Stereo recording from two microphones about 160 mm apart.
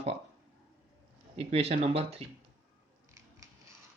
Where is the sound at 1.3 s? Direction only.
40° right (ahead or behind).